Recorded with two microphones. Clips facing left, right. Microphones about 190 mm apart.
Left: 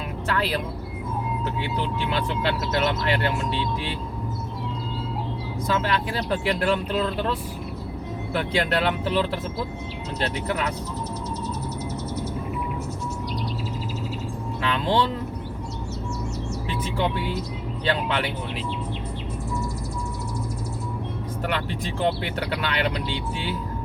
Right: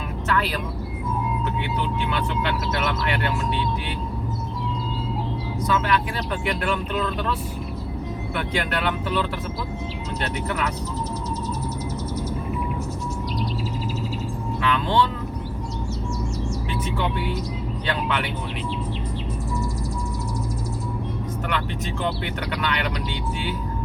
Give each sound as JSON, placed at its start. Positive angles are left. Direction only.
{"t": 0.3, "sound": "vehicle", "side_deg": 35}
{"t": 2.0, "sound": "speech", "side_deg": 35}
{"t": 5.6, "sound": "speech", "side_deg": 30}
{"t": 14.6, "sound": "speech", "side_deg": 30}
{"t": 17.8, "sound": "speech", "side_deg": 30}
{"t": 22.0, "sound": "speech", "side_deg": 30}